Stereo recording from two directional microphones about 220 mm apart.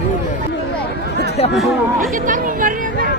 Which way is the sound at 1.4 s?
25° left (ahead or behind).